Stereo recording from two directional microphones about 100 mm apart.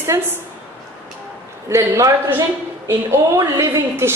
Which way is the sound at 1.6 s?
30° right (ahead or behind).